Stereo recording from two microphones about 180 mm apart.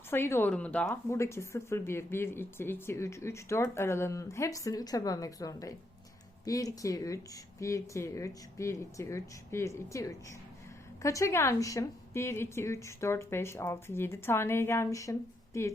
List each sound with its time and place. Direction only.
0.1 s speech: 10° left (ahead or behind)